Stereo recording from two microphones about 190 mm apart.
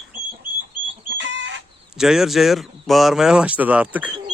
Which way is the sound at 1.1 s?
75° right (ahead or behind).